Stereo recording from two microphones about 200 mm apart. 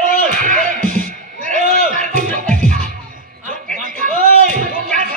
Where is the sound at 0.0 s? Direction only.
40° right (ahead or behind).